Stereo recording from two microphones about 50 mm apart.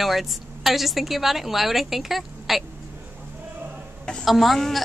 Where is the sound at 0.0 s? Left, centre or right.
Centre.